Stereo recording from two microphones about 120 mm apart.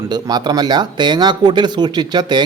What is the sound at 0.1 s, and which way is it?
Speech, 35° right (ahead or behind).